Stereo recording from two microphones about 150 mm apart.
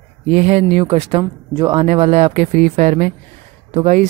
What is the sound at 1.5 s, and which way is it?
Speech, 30° right (ahead or behind).